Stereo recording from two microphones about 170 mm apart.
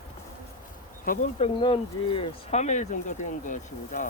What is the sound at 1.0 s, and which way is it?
Speech, 55° left (ahead or behind).